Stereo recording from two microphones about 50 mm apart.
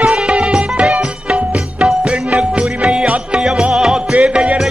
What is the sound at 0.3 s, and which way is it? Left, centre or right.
Music, right.